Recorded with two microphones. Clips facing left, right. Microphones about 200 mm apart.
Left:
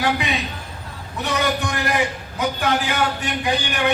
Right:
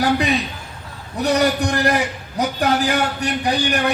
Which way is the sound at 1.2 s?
40° right (ahead or behind).